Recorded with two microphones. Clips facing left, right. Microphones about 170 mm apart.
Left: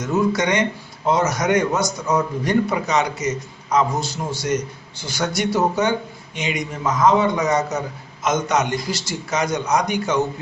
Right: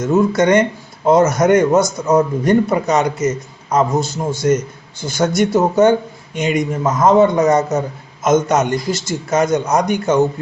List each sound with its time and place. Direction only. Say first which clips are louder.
0.0 s a man's voice: right 6 dB; 50° right (ahead or behind)